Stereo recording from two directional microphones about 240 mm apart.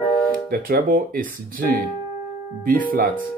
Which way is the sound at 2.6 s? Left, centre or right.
Right.